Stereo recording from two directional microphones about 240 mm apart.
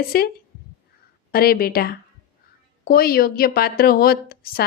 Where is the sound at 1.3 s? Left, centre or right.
Left.